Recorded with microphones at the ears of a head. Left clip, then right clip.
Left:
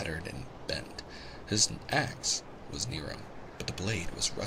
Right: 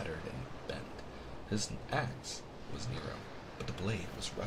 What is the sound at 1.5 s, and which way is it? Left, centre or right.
Speech, left.